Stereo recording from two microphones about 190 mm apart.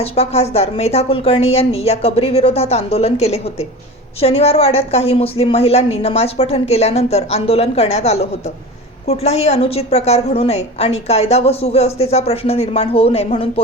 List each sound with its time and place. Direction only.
0.0 s a woman's voice: 30° left (ahead or behind)